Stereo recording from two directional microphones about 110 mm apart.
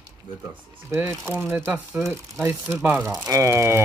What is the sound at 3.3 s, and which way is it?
Speech, 25° right (ahead or behind).